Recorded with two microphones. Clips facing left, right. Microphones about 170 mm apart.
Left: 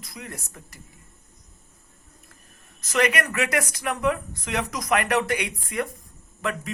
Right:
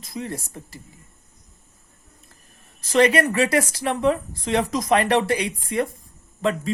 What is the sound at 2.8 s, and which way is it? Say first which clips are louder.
Speech: right 6 dB; 30° right (ahead or behind).